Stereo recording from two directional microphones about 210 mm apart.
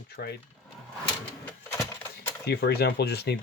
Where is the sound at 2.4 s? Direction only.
50° left (ahead or behind).